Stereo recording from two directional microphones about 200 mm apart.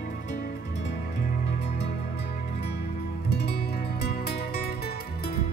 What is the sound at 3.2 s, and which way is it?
Music, 55° left (ahead or behind).